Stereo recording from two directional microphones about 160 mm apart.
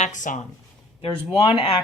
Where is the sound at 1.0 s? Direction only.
30° left (ahead or behind).